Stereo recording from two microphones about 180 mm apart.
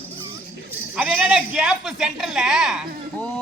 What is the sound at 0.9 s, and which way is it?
A man's voice, 5° right (ahead or behind).